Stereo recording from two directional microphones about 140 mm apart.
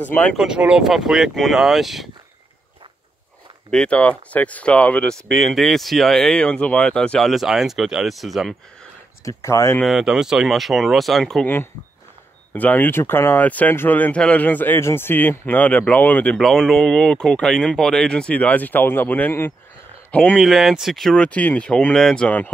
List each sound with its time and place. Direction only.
0.1 s speech: 10° left (ahead or behind)
0.4 s speech: 5° right (ahead or behind)
3.7 s speech: 5° left (ahead or behind)
9.2 s speech: 20° left (ahead or behind)
9.8 s speech: 5° right (ahead or behind)
11.4 s speech: 15° left (ahead or behind)
20.3 s speech: centre (ahead or behind)